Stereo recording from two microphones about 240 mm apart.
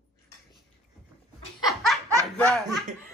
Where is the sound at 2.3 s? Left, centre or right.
Centre.